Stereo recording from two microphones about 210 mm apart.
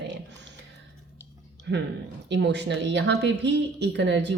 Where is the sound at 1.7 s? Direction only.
55° right (ahead or behind).